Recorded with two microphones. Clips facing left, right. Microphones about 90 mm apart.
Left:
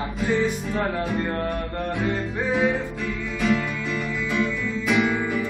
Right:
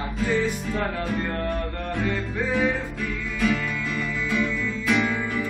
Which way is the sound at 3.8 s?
5° left (ahead or behind).